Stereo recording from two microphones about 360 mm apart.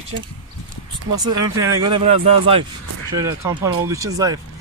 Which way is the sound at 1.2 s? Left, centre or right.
Centre.